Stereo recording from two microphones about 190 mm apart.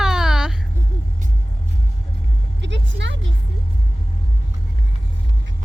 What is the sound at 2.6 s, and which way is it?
Vehicle, 70° right (ahead or behind).